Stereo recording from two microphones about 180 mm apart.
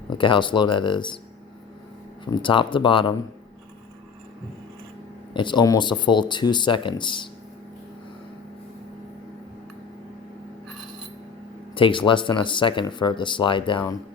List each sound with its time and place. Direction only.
0.2 s speech: 25° left (ahead or behind)
2.2 s speech: 25° left (ahead or behind)
5.3 s speech: 25° left (ahead or behind)
11.7 s speech: 30° left (ahead or behind)